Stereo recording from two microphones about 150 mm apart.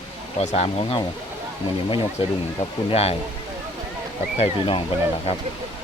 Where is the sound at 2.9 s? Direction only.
45° left (ahead or behind).